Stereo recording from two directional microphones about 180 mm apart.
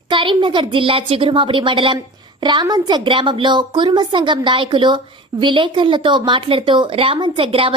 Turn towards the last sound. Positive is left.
turn(degrees=-30)  # may be behind; listen again after turning